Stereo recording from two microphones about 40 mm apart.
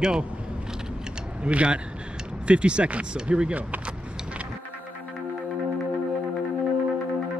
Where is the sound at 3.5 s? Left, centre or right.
Right.